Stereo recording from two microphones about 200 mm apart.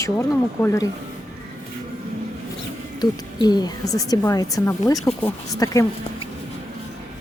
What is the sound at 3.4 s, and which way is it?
Speech, 20° left (ahead or behind).